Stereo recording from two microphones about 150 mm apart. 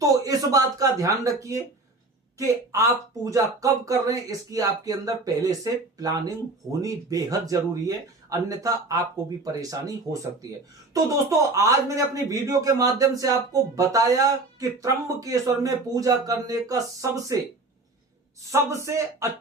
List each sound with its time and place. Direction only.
0.0 s a sound: 25° right (ahead or behind)
2.4 s speech: 20° right (ahead or behind)
11.5 s speech: 20° right (ahead or behind)
18.5 s speech: 20° right (ahead or behind)